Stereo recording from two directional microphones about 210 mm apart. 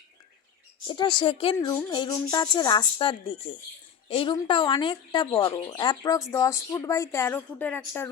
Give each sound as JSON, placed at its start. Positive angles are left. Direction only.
{"t": 0.9, "sound": "a woman's voice", "side_deg": 20}